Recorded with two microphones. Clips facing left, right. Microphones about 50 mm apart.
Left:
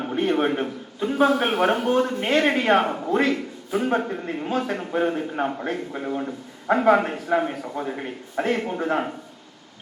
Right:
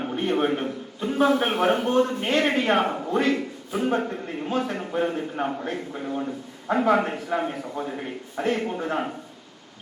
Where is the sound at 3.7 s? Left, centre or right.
Centre.